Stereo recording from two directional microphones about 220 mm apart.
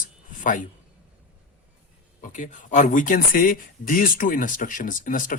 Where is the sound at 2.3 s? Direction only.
35° left (ahead or behind).